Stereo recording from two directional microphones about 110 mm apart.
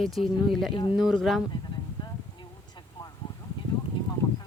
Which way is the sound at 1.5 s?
40° left (ahead or behind).